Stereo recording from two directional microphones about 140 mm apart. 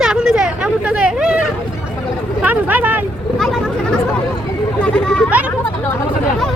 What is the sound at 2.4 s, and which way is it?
Speech, 10° right (ahead or behind).